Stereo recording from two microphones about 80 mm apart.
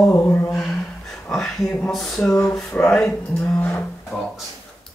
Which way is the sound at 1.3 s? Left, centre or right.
Centre.